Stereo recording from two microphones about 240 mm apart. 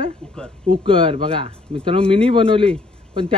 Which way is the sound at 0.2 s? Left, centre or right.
Centre.